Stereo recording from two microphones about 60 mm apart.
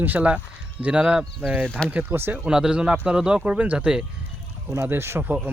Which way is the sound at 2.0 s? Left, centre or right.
Right.